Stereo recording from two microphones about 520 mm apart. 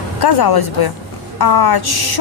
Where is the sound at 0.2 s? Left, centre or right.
Left.